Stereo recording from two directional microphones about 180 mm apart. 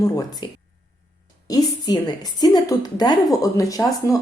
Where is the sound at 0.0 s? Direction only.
20° left (ahead or behind).